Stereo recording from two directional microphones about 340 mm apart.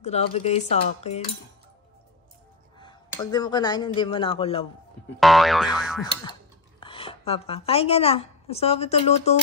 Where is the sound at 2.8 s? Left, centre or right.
Centre.